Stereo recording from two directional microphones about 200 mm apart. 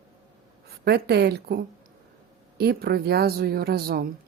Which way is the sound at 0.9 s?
55° right (ahead or behind).